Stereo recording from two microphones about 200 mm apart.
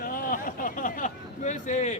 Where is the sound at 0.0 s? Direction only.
45° left (ahead or behind).